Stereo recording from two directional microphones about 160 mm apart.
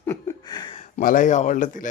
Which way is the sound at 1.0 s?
55° left (ahead or behind).